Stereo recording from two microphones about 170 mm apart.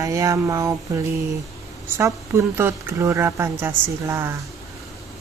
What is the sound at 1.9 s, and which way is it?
A woman's voice, 15° right (ahead or behind).